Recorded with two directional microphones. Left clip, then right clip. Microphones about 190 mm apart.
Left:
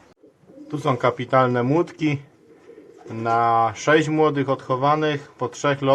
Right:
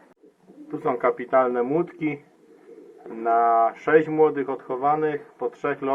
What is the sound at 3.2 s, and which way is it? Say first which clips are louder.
A man's voice: even; 20° left (ahead or behind).